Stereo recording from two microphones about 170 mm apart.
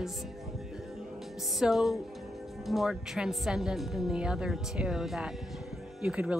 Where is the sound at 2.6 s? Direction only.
Centre (ahead or behind).